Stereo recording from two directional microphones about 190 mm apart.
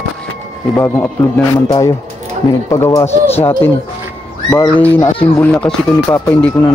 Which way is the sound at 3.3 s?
30° left (ahead or behind).